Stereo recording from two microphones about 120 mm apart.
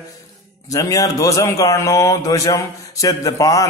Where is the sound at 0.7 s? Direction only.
25° left (ahead or behind).